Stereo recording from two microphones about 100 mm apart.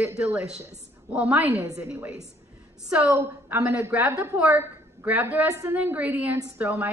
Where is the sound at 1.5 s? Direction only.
35° right (ahead or behind).